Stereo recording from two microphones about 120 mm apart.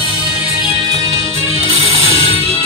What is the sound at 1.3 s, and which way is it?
Music, 50° left (ahead or behind).